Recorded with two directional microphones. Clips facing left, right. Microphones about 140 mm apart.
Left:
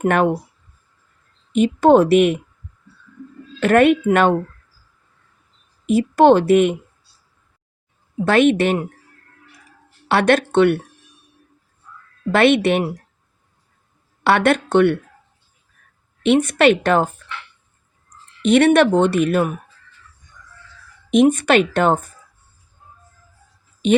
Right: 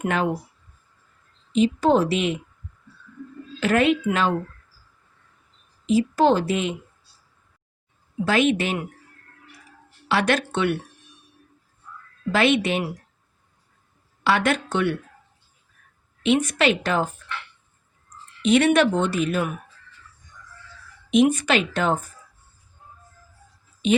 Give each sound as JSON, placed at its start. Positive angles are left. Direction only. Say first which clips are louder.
{"t": 0.0, "sound": "speech", "louder": "left 7 dB", "side_deg": 60}
{"t": 1.5, "sound": "speech", "louder": "left 6 dB", "side_deg": 60}
{"t": 3.6, "sound": "speech", "louder": "left 6 dB", "side_deg": 60}
{"t": 5.8, "sound": "speech", "louder": "left 5 dB", "side_deg": 65}
{"t": 8.2, "sound": "speech", "louder": "left 6 dB", "side_deg": 55}
{"t": 10.1, "sound": "speech", "louder": "left 6 dB", "side_deg": 55}
{"t": 12.3, "sound": "speech", "louder": "left 6 dB", "side_deg": 60}
{"t": 14.3, "sound": "speech", "louder": "left 6 dB", "side_deg": 60}
{"t": 16.2, "sound": "speech", "louder": "left 6 dB", "side_deg": 60}
{"t": 18.4, "sound": "speech", "louder": "left 5 dB", "side_deg": 60}
{"t": 21.1, "sound": "speech", "louder": "left 5 dB", "side_deg": 55}